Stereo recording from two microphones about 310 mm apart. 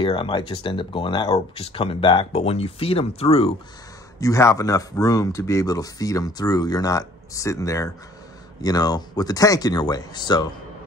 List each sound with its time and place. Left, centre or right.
0.0 s speech: centre